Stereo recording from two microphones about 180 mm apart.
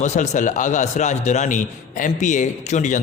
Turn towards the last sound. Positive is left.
turn(degrees=45)  # may be behind; listen again after turning